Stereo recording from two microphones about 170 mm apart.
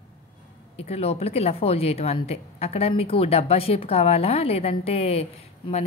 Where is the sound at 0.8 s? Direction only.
35° left (ahead or behind).